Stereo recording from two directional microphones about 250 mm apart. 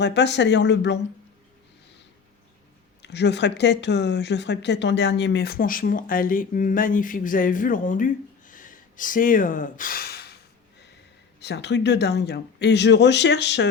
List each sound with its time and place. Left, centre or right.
0.0 s speech: left
3.0 s speech: left
11.3 s speech: left